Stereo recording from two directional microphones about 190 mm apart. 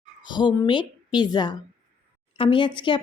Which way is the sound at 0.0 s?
25° left (ahead or behind).